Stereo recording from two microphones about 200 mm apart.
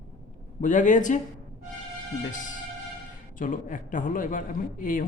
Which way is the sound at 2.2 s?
40° left (ahead or behind).